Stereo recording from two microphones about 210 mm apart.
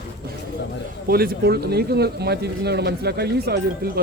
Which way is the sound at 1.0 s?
45° right (ahead or behind).